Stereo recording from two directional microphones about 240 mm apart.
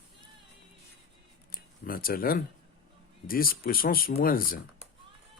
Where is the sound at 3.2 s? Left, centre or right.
Left.